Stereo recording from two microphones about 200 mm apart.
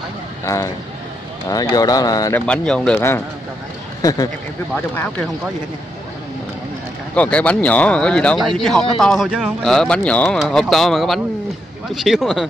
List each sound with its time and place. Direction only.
0.5 s speech: 15° left (ahead or behind)
2.4 s speech: 5° left (ahead or behind)
7.2 s speech: 5° left (ahead or behind)